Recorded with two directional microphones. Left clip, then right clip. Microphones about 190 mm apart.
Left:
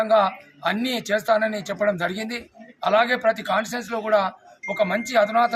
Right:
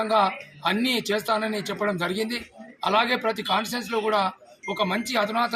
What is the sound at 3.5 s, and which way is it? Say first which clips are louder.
Speech: left 2 dB; 5° left (ahead or behind).